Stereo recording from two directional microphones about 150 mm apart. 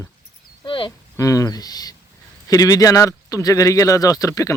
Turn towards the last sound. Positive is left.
turn(degrees=20)  # may be behind; listen again after turning